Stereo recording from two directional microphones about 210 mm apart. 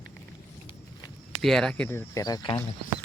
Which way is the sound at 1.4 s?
Centre (ahead or behind).